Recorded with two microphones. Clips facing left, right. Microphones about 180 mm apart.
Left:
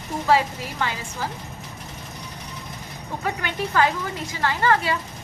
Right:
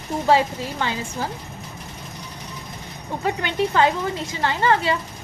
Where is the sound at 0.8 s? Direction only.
25° right (ahead or behind).